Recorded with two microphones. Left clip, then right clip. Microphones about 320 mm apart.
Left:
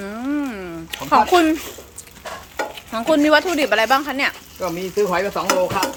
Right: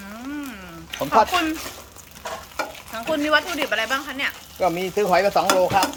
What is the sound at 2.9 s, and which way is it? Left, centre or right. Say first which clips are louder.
Speech: left 6 dB; left.